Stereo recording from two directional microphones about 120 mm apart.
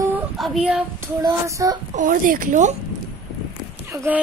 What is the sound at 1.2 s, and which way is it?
Child singing, 30° right (ahead or behind).